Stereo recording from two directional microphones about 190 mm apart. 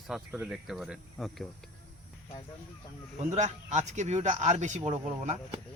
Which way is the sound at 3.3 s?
35° right (ahead or behind).